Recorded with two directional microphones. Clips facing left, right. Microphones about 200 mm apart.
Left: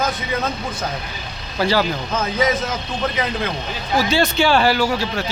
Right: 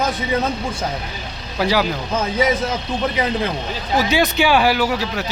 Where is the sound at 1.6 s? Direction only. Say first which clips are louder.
Even; 15° right (ahead or behind).